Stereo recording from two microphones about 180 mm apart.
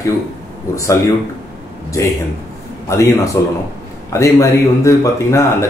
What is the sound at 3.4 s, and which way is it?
Speech, 15° left (ahead or behind).